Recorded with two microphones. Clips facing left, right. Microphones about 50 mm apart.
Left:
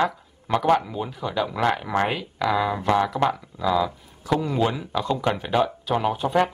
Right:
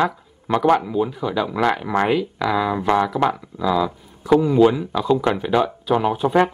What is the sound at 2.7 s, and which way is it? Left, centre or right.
Speech, centre.